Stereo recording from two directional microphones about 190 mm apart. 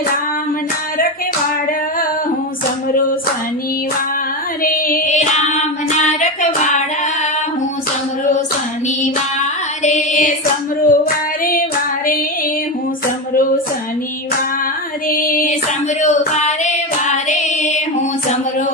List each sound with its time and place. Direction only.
4.6 s child singing: 45° left (ahead or behind)
9.0 s female singing: 40° left (ahead or behind)
15.0 s female singing: 50° left (ahead or behind)